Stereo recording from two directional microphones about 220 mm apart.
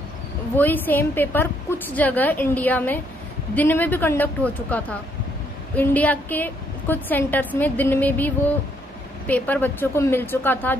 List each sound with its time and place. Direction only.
0.6 s a woman's voice: 10° left (ahead or behind)